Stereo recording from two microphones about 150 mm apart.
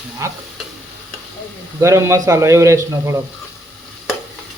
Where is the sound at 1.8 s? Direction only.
20° right (ahead or behind).